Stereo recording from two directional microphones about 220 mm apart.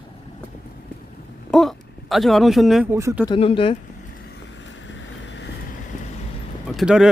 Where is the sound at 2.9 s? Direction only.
15° right (ahead or behind).